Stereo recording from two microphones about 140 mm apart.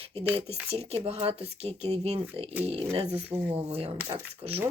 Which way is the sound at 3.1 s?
10° right (ahead or behind).